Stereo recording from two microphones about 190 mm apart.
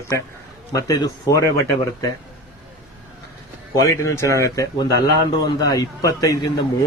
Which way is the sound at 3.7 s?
15° left (ahead or behind).